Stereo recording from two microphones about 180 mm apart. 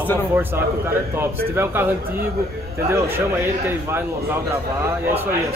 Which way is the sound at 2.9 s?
15° right (ahead or behind).